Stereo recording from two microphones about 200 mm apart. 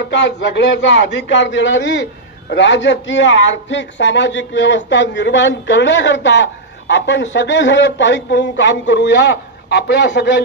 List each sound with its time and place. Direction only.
0.1 s a man's voice: 65° left (ahead or behind)